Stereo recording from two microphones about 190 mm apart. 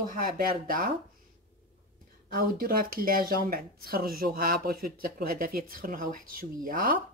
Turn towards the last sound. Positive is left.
turn(degrees=-50)  # may be behind; listen again after turning